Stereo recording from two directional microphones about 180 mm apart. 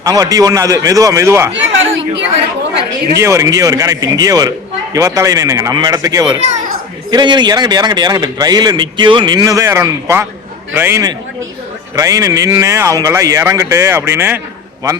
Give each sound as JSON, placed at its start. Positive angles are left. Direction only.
{"t": 0.0, "sound": "speech", "side_deg": -20}
{"t": 1.5, "sound": "chatter", "side_deg": -90}
{"t": 3.2, "sound": "speech", "side_deg": -15}